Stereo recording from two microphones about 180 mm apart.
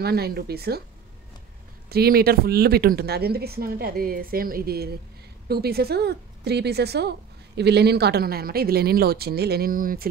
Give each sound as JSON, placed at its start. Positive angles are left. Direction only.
{"t": 0.0, "sound": "speech", "side_deg": -60}
{"t": 1.9, "sound": "speech", "side_deg": -60}